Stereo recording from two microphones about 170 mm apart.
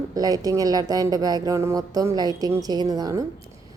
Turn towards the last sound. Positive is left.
turn(degrees=-20)  # may be behind; listen again after turning